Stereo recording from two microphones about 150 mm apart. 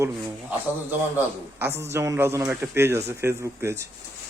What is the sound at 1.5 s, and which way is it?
A man's voice, 15° right (ahead or behind).